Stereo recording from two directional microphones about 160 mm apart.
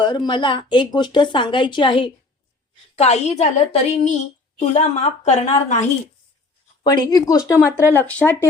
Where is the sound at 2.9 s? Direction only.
40° left (ahead or behind).